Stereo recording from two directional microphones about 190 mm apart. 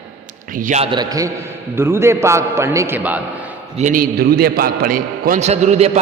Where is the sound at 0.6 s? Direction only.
35° right (ahead or behind).